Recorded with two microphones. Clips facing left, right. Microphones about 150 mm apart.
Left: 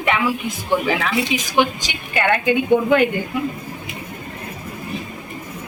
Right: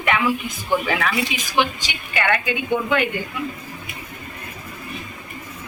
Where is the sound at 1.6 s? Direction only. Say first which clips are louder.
Left 2 dB; 40° left (ahead or behind).